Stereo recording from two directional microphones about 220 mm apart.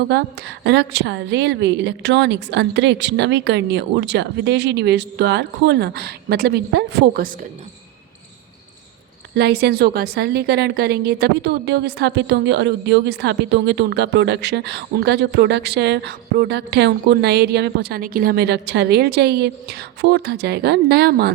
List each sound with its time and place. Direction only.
0.1 s a woman's voice: 50° right (ahead or behind)
9.3 s a woman's voice: 45° right (ahead or behind)